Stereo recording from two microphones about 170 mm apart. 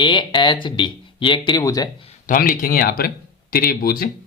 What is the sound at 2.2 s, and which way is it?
Speech, 55° left (ahead or behind).